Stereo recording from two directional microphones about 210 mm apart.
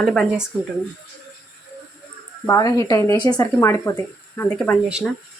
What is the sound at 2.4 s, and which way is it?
Speech, 15° left (ahead or behind).